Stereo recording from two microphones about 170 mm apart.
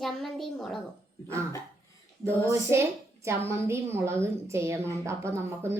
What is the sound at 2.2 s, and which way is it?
A woman's voice, 15° right (ahead or behind).